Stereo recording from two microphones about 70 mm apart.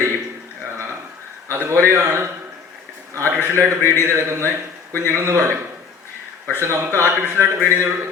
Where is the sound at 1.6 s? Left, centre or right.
Right.